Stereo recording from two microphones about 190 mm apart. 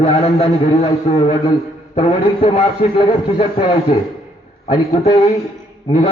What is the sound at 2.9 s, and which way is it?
Speech, 25° left (ahead or behind).